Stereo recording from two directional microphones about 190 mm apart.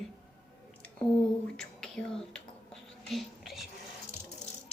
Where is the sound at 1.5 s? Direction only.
5° left (ahead or behind).